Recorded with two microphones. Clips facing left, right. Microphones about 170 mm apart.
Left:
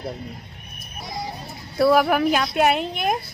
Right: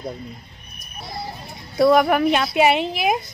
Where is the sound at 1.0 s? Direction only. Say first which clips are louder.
Left 1 dB; 15° left (ahead or behind).